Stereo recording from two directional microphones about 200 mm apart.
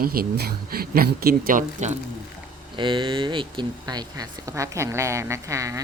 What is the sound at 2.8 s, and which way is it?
Speech, 25° right (ahead or behind).